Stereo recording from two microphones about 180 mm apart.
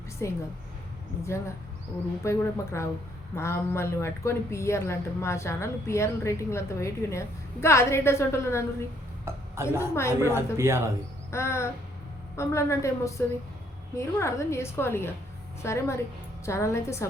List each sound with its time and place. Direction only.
1.2 s a woman's voice: 15° left (ahead or behind)
9.2 s a sound: 15° right (ahead or behind)
10.2 s a woman's voice: 15° right (ahead or behind)
11.3 s a woman's voice: 15° left (ahead or behind)